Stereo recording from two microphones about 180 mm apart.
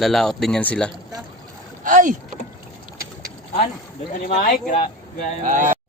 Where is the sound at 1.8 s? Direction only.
50° right (ahead or behind).